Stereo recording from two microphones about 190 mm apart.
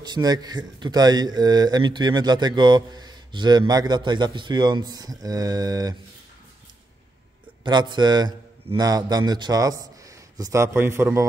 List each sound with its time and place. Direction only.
0.0 s speech: 20° right (ahead or behind)
7.6 s a man's voice: 25° right (ahead or behind)